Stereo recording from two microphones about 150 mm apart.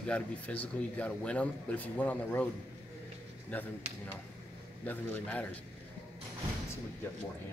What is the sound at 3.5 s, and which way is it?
Speech, 10° left (ahead or behind).